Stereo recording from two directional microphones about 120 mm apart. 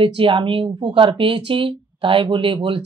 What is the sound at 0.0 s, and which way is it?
Speech, 50° right (ahead or behind).